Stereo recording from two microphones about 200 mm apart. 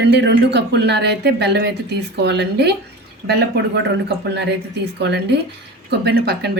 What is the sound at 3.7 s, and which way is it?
Speech, 60° right (ahead or behind).